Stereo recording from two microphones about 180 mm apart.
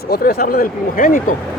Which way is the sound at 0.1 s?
55° left (ahead or behind).